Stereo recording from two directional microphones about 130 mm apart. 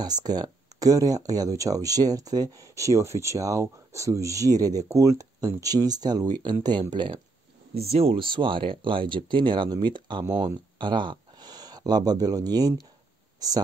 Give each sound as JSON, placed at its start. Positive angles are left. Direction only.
{"t": 0.0, "sound": "speech", "side_deg": -30}
{"t": 7.7, "sound": "speech", "side_deg": -50}